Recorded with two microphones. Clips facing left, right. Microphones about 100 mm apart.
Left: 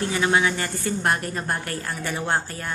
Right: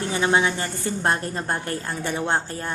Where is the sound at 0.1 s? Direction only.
25° right (ahead or behind).